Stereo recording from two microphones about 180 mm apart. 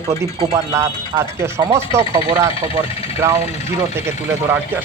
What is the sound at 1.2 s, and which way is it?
A man's voice, 15° right (ahead or behind).